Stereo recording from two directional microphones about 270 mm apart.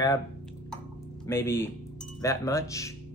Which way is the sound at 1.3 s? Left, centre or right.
Centre.